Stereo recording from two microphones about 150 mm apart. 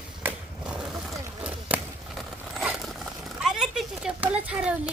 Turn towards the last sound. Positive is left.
turn(degrees=-5)  # may be behind; listen again after turning